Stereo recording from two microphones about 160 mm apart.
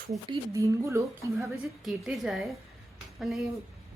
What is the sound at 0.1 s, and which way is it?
Speech, 20° right (ahead or behind).